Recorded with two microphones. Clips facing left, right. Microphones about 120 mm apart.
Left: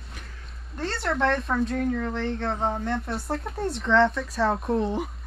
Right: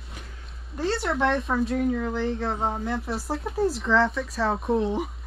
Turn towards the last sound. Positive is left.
turn(degrees=0)  # may be behind; listen again after turning